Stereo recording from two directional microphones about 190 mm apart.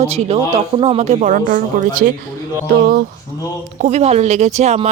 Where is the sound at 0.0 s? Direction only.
35° right (ahead or behind).